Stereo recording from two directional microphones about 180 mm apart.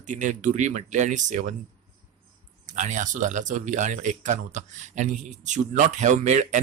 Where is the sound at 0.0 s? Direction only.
45° right (ahead or behind).